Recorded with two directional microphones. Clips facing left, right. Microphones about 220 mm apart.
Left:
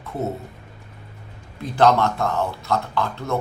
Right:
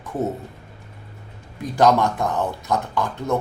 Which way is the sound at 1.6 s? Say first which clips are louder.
Even; 15° right (ahead or behind).